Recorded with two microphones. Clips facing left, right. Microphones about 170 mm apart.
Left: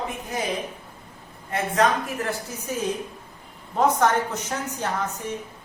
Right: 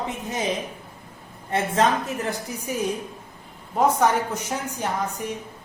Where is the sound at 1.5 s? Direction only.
30° right (ahead or behind).